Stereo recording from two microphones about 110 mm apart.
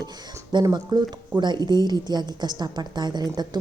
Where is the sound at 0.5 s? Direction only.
40° right (ahead or behind).